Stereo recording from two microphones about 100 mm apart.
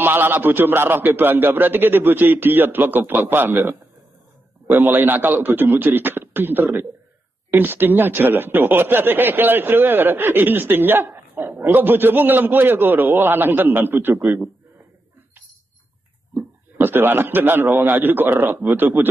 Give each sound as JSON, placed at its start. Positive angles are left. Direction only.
{"t": 0.0, "sound": "speech", "side_deg": -20}
{"t": 4.6, "sound": "speech", "side_deg": -20}
{"t": 16.7, "sound": "speech", "side_deg": -20}